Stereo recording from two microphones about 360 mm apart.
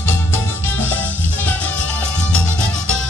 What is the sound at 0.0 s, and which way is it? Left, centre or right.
Music, centre.